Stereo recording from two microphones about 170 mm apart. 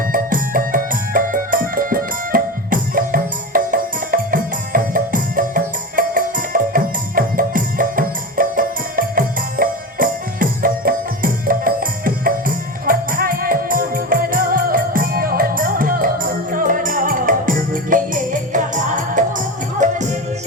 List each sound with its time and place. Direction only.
0.1 s music: 55° right (ahead or behind)